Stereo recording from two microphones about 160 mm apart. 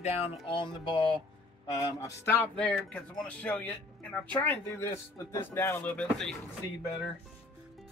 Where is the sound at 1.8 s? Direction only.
20° left (ahead or behind).